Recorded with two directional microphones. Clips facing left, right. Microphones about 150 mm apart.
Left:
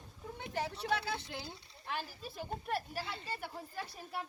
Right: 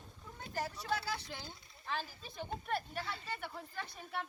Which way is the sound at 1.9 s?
5° left (ahead or behind).